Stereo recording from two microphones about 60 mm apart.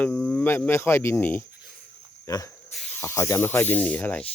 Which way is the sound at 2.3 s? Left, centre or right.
Left.